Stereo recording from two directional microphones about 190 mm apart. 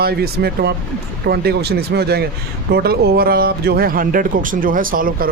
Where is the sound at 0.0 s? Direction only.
55° right (ahead or behind).